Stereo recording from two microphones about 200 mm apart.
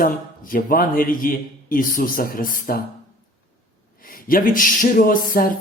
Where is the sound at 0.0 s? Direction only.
45° left (ahead or behind).